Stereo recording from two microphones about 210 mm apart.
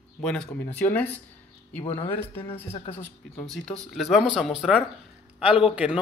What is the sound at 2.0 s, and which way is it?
Speech, 25° left (ahead or behind).